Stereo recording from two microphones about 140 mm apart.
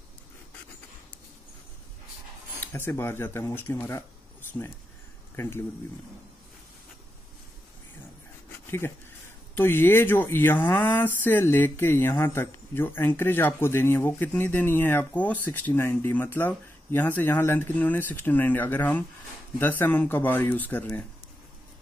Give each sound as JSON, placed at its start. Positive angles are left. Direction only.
{"t": 2.7, "sound": "speech", "side_deg": 20}
{"t": 8.6, "sound": "speech", "side_deg": 15}